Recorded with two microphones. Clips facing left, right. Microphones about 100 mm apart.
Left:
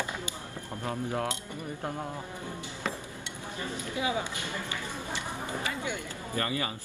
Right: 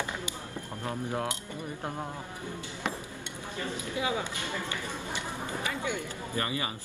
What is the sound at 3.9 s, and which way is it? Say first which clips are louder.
Speech: left 1 dB; 25° left (ahead or behind).